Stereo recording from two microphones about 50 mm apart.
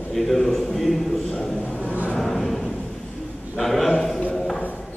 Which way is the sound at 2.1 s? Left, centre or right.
Centre.